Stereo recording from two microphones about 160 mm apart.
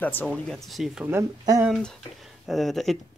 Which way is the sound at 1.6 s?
Centre (ahead or behind).